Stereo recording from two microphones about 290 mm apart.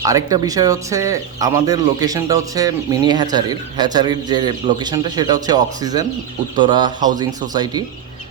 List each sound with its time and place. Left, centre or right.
0.0 s speech: centre